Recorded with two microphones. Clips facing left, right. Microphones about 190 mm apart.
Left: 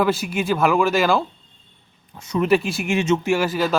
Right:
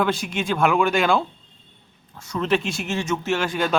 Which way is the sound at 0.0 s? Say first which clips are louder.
Left 3 dB; 5° left (ahead or behind).